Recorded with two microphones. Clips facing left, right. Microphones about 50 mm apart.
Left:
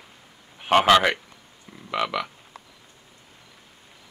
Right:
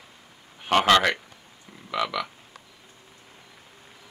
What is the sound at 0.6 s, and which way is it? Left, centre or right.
A man's voice, centre.